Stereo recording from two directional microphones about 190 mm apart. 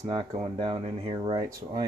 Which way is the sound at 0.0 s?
25° right (ahead or behind).